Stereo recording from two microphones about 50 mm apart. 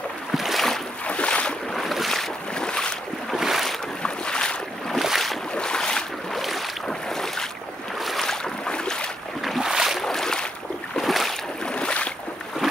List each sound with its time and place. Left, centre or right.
0.4 s boat: centre
1.0 s boat: left
1.7 s boat: centre
2.5 s boat: centre
3.3 s boat: centre
4.0 s boat: centre
4.9 s boat: centre
5.5 s boat: centre
8.0 s boat: centre
8.3 s boat: centre
9.6 s boat: centre
10.0 s boat: centre
11.6 s boat: left